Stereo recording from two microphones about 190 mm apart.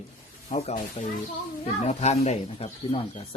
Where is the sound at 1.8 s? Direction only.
35° left (ahead or behind).